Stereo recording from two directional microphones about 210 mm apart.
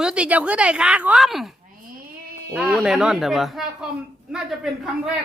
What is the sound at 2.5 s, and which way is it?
Speech, 5° right (ahead or behind).